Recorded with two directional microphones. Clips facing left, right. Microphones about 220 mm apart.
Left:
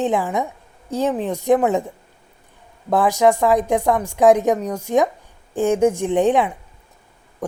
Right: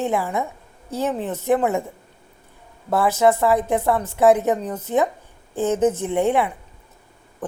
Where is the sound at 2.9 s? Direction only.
15° left (ahead or behind).